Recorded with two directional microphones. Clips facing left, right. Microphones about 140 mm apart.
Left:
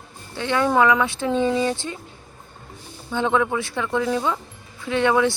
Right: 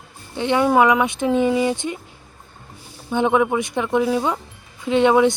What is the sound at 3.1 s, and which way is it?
Speech, 15° right (ahead or behind).